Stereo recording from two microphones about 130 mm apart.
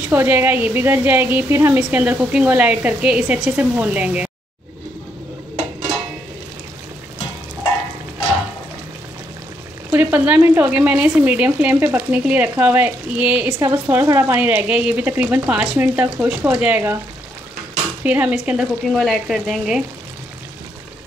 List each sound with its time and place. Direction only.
0.1 s speech: 15° right (ahead or behind)
9.8 s speech: 10° right (ahead or behind)
13.6 s speech: 25° right (ahead or behind)
18.0 s speech: 10° right (ahead or behind)
18.9 s speech: 5° left (ahead or behind)